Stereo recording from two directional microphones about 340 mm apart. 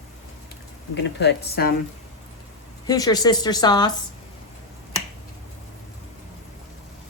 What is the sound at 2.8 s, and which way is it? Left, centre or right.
A woman's voice, centre.